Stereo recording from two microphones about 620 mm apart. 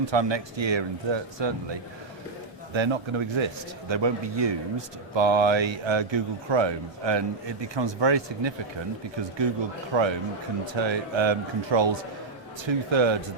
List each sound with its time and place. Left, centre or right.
0.0 s a man's voice: right
9.9 s a man's voice: right